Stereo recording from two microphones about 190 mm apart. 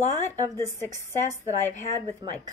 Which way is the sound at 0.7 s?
15° left (ahead or behind).